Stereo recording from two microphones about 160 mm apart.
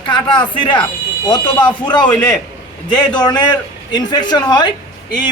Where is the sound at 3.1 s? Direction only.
25° left (ahead or behind).